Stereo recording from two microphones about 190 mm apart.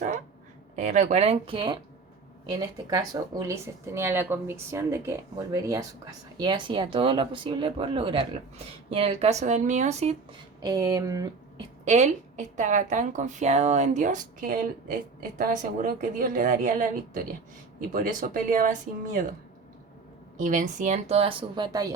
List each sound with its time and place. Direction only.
0.8 s a woman's voice: 40° right (ahead or behind)
10.6 s speech: 20° right (ahead or behind)
11.9 s a woman's voice: 35° right (ahead or behind)
20.4 s a woman's voice: 40° right (ahead or behind); by 21.9 s 20° right (ahead or behind)